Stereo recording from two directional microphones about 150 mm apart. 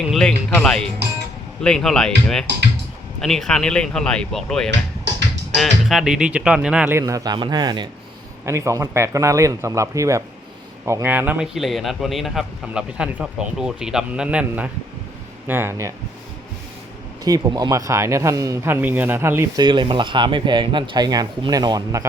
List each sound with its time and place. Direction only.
0.1 s a man's voice: 5° left (ahead or behind)
7.0 s a man's voice: 25° right (ahead or behind)
17.2 s speech: 25° right (ahead or behind)
19.6 s speech: 35° right (ahead or behind)